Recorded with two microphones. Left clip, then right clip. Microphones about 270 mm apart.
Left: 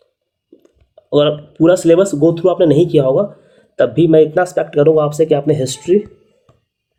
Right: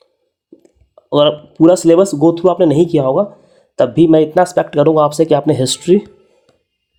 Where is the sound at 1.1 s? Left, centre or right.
Right.